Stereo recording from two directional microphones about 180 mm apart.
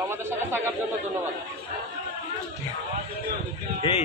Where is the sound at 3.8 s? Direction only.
30° left (ahead or behind).